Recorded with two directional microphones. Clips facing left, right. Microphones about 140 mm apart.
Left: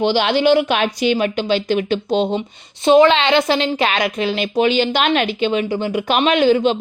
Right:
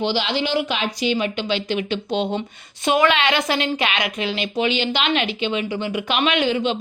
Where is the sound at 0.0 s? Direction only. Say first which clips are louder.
Left 7 dB; 55° left (ahead or behind).